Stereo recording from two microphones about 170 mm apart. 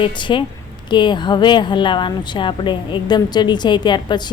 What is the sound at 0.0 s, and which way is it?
Speech, 30° left (ahead or behind).